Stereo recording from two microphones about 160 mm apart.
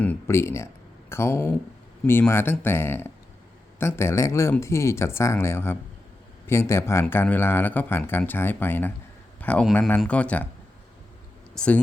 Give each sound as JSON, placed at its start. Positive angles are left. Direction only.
{"t": 0.0, "sound": "speech", "side_deg": 15}
{"t": 11.5, "sound": "speech", "side_deg": 5}